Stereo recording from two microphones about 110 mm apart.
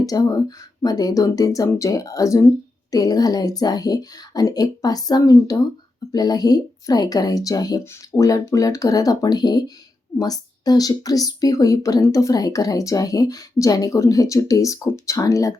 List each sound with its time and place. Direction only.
0.0 s speech: 35° left (ahead or behind)